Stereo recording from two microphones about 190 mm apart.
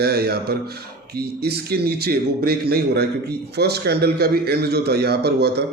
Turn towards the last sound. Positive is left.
turn(degrees=-55)  # may be behind; listen again after turning